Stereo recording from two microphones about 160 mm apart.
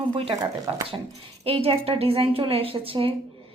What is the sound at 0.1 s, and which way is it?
A woman's voice, 30° right (ahead or behind).